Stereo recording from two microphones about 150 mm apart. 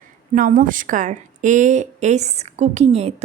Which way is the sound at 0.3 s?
65° right (ahead or behind).